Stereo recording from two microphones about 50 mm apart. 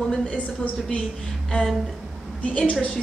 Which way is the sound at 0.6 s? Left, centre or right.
Left.